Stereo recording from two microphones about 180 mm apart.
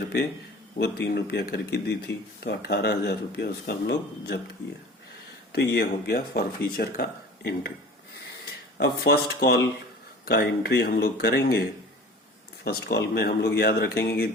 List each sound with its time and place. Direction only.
0.8 s speech: 65° left (ahead or behind)
5.5 s speech: 60° left (ahead or behind)
8.8 s speech: 65° left (ahead or behind)